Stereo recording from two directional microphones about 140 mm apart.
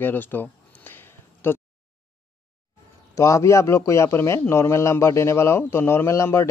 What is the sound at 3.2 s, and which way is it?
Speech, 20° left (ahead or behind).